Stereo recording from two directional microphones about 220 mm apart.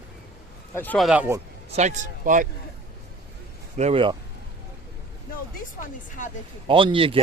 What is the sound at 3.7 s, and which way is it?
Speech, 25° right (ahead or behind).